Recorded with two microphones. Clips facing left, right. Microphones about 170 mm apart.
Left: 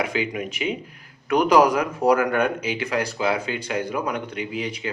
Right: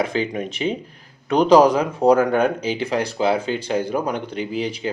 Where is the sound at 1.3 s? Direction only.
25° right (ahead or behind).